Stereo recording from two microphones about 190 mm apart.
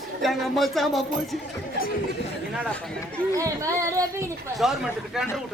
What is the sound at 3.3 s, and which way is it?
Speech, 15° right (ahead or behind).